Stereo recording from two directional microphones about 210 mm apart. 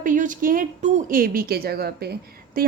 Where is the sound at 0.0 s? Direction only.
40° right (ahead or behind).